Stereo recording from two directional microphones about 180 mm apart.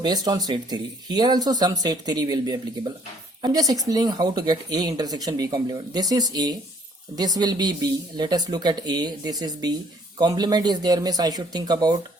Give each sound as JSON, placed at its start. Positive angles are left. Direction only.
{"t": 0.0, "sound": "speech", "side_deg": -20}